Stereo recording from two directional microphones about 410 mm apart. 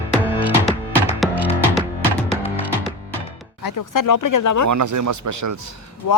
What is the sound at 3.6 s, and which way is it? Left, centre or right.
Speech, left.